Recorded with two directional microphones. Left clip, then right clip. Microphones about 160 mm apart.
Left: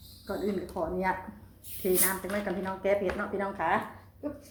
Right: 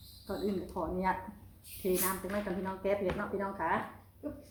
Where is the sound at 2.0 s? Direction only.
5° left (ahead or behind).